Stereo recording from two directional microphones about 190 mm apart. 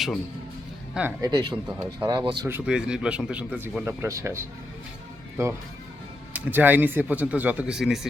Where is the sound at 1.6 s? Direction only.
10° right (ahead or behind).